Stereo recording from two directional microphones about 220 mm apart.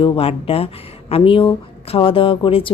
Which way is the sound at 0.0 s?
25° left (ahead or behind).